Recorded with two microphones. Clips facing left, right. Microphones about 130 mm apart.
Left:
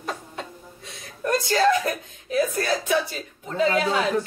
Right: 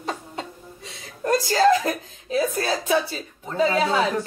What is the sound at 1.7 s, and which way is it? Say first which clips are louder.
Chuckle: right 2 dB; 30° right (ahead or behind).